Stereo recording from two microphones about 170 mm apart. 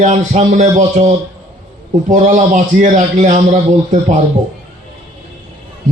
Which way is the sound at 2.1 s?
45° right (ahead or behind).